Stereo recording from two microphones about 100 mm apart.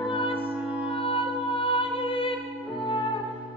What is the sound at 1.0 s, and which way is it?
Music, 65° left (ahead or behind).